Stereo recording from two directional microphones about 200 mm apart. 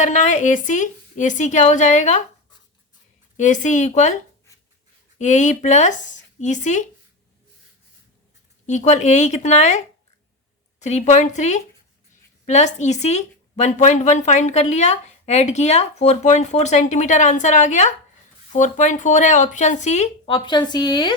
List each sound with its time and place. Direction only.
0.0 s speech: 35° left (ahead or behind)
3.3 s speech: 40° left (ahead or behind)
5.1 s speech: 35° left (ahead or behind)
8.6 s speech: 35° left (ahead or behind); by 21.1 s 20° left (ahead or behind)